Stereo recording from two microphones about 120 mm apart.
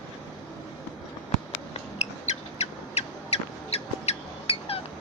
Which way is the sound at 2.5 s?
60° left (ahead or behind).